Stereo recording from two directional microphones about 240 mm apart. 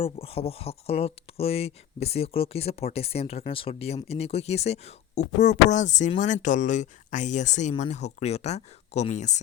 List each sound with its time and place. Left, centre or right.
0.0 s speech: left